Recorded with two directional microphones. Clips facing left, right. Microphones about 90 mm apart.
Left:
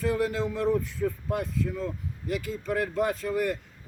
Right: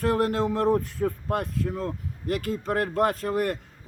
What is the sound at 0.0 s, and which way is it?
A man's voice, 60° right (ahead or behind).